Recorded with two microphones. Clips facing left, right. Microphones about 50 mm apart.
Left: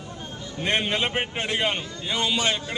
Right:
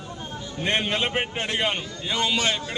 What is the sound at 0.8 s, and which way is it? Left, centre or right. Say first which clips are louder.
Speech: even; centre.